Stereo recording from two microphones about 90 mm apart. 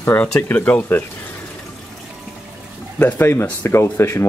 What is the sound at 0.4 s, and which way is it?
Speech, 20° left (ahead or behind).